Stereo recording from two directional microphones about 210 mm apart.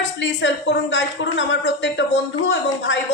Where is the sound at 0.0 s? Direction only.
60° left (ahead or behind).